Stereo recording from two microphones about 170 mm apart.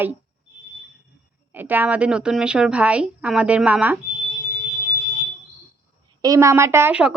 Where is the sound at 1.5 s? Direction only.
10° right (ahead or behind).